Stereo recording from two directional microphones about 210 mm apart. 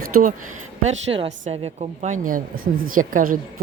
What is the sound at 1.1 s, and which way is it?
A woman's voice, 25° right (ahead or behind).